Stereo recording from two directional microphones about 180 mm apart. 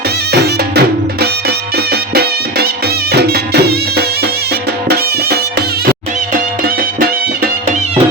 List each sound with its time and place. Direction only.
0.3 s music: 60° right (ahead or behind)